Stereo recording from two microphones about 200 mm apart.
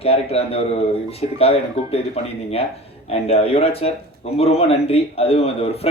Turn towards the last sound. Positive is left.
turn(degrees=30)  # may be behind; listen again after turning